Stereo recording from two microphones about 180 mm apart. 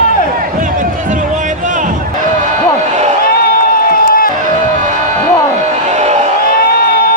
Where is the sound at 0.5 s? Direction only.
50° right (ahead or behind).